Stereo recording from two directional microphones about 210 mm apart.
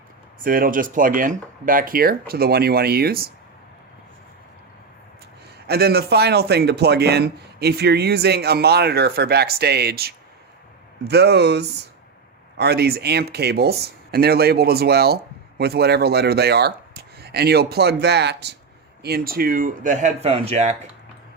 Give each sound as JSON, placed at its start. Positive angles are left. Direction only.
{"t": 0.3, "sound": "speech", "side_deg": -40}
{"t": 5.6, "sound": "speech", "side_deg": -50}